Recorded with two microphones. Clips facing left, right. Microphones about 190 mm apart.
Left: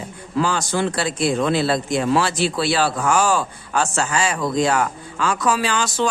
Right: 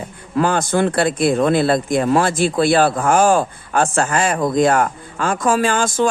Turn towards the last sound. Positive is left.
turn(degrees=-50)  # may be behind; listen again after turning